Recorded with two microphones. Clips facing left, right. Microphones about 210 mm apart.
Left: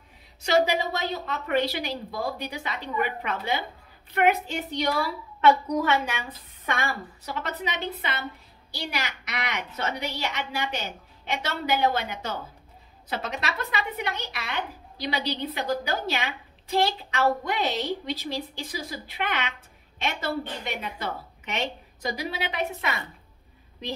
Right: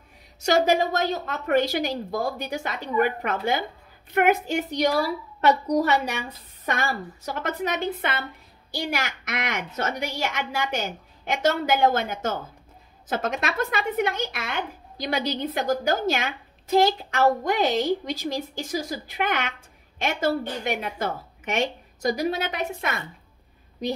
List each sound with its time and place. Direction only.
0.4 s a woman's voice: 45° right (ahead or behind)